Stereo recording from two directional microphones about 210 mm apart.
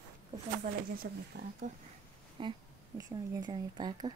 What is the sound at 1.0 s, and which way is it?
Speech, 50° right (ahead or behind).